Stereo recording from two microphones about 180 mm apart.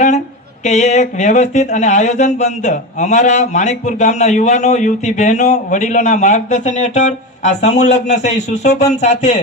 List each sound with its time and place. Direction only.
0.6 s speech: 40° left (ahead or behind)